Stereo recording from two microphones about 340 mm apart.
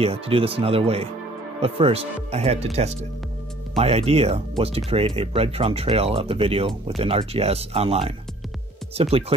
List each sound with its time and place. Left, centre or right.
0.0 s speech: centre